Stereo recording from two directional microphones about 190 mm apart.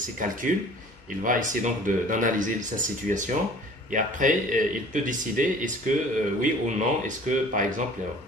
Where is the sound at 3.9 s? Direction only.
45° right (ahead or behind).